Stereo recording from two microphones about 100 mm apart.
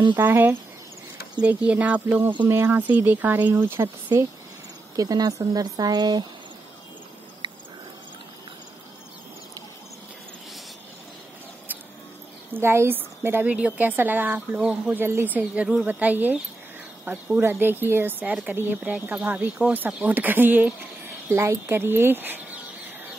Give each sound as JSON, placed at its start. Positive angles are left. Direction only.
{"t": 0.2, "sound": "a woman's voice", "side_deg": -20}
{"t": 4.9, "sound": "speech", "side_deg": -40}
{"t": 12.5, "sound": "a woman's voice", "side_deg": -25}
{"t": 15.0, "sound": "a woman's voice", "side_deg": -20}
{"t": 21.3, "sound": "speech", "side_deg": -30}